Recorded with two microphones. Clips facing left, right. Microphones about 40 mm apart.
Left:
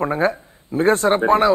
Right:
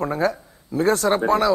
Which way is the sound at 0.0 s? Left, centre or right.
Left.